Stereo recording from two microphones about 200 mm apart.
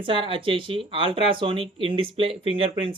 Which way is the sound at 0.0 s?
25° right (ahead or behind).